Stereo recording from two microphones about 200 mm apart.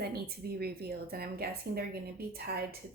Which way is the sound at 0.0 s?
50° right (ahead or behind).